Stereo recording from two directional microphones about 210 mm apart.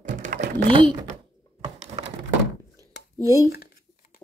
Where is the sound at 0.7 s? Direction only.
25° right (ahead or behind).